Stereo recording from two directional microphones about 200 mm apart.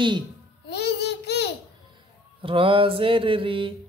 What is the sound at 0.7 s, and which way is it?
Babbling, 55° left (ahead or behind).